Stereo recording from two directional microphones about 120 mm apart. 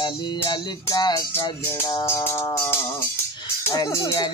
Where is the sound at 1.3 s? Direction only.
20° left (ahead or behind).